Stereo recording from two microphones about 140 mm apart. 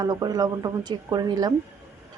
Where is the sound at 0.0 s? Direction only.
30° right (ahead or behind).